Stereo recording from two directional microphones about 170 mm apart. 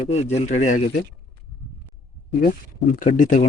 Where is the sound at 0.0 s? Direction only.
40° left (ahead or behind).